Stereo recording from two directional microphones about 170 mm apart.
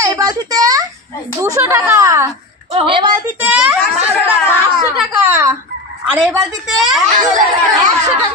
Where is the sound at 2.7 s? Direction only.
30° right (ahead or behind).